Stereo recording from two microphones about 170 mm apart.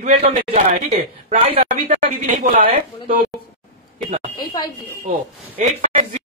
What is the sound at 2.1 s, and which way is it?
A woman's voice, 55° right (ahead or behind).